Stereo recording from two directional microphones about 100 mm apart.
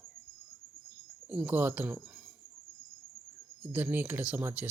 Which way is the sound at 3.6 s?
15° right (ahead or behind).